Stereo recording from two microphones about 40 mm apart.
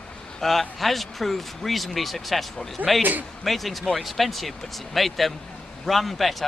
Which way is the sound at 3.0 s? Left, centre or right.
Right.